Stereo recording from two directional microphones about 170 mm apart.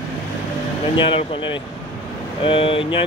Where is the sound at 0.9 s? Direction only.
30° left (ahead or behind).